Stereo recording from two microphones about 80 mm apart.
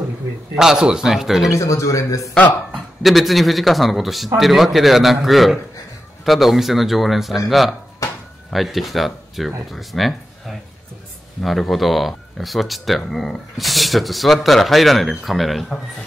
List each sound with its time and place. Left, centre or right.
0.6 s speech: centre
1.6 s a man's voice: left
2.7 s speech: centre